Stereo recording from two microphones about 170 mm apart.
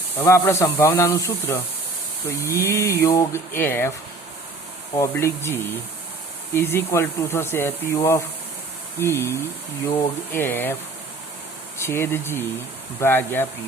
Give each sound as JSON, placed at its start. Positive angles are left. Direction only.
{"t": 0.2, "sound": "speech", "side_deg": 15}
{"t": 4.9, "sound": "speech", "side_deg": 15}
{"t": 11.8, "sound": "speech", "side_deg": 15}